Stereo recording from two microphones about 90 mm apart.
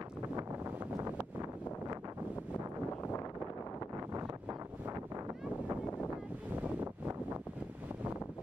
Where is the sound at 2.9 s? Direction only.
35° left (ahead or behind).